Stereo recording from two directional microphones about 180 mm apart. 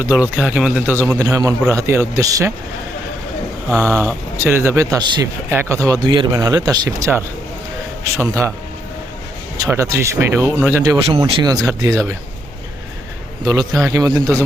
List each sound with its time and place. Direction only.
0.3 s a man's voice: 5° right (ahead or behind)
3.8 s a man's voice: 15° right (ahead or behind)
9.6 s a man's voice: 15° right (ahead or behind)
10.9 s speech: 30° right (ahead or behind)
13.8 s a man's voice: 20° right (ahead or behind)